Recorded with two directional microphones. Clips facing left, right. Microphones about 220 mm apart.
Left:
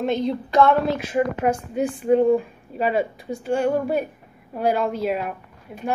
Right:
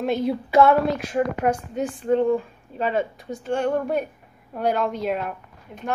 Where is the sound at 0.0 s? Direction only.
5° right (ahead or behind).